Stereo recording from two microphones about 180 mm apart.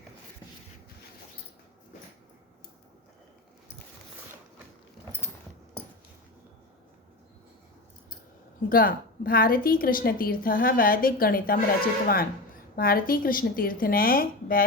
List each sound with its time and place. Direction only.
8.7 s a woman's voice: 55° left (ahead or behind)